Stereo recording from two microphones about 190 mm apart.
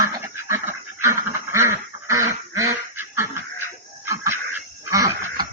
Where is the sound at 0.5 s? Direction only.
15° right (ahead or behind).